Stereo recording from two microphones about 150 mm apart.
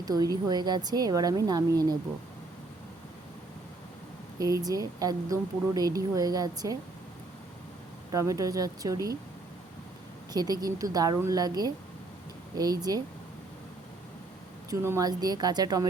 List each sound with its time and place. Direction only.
0.0 s speech: 25° right (ahead or behind)
4.4 s speech: 25° right (ahead or behind)
8.1 s speech: 20° right (ahead or behind)
10.3 s speech: 25° right (ahead or behind)
14.7 s speech: 20° right (ahead or behind)